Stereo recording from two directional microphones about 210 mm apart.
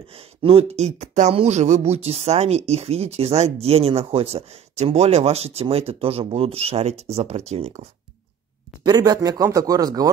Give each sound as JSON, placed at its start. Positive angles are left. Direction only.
{"t": 0.1, "sound": "speech", "side_deg": -25}
{"t": 8.8, "sound": "speech", "side_deg": -20}